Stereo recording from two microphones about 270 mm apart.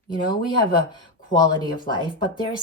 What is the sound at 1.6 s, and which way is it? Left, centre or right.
Speech, centre.